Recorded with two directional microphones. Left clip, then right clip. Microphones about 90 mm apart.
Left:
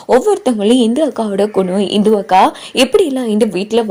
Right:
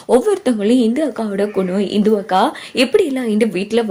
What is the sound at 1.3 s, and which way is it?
Speech, 80° left.